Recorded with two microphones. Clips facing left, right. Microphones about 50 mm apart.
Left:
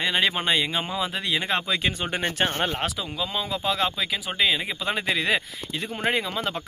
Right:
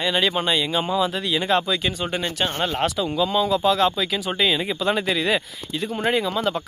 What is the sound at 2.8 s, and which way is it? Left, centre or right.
Speech, centre.